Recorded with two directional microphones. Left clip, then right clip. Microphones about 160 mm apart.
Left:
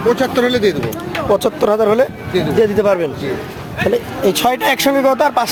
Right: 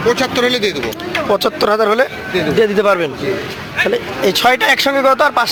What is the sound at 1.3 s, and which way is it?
Speech, 15° left (ahead or behind).